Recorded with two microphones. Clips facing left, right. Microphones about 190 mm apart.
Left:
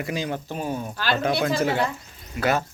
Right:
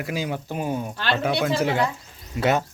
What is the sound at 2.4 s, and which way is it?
Speech, 20° right (ahead or behind).